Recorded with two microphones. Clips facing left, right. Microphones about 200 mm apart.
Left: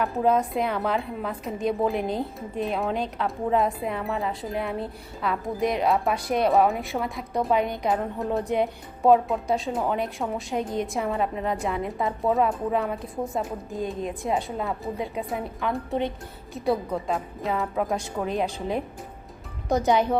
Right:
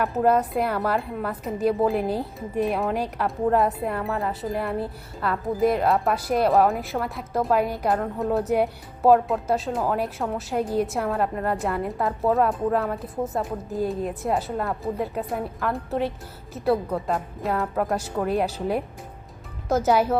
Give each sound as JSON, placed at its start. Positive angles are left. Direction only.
{"t": 0.0, "sound": "a woman's voice", "side_deg": -5}